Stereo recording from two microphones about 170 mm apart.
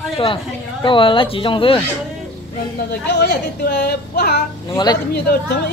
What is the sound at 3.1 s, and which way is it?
Speech, 70° left (ahead or behind).